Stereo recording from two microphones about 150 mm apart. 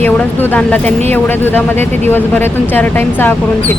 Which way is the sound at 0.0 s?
10° left (ahead or behind).